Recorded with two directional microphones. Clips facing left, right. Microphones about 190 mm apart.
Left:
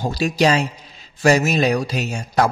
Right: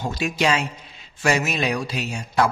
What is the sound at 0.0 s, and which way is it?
A man's voice, 35° left (ahead or behind).